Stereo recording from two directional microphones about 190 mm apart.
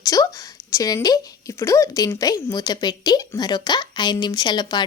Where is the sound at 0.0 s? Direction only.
20° left (ahead or behind).